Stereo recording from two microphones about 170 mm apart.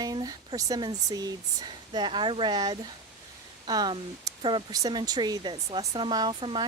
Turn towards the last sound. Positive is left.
turn(degrees=-30)  # may be behind; listen again after turning